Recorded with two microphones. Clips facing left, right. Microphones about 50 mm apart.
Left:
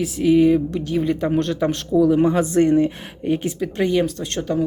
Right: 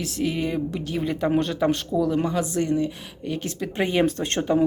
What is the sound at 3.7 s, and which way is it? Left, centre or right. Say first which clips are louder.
Speech: left 1 dB; right.